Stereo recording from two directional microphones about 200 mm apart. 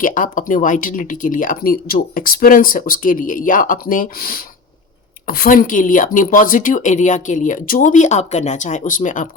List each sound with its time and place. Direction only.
0.0 s speech: 40° left (ahead or behind)